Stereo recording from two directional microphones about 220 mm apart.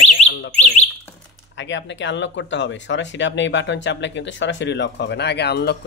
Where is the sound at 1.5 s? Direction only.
55° left (ahead or behind).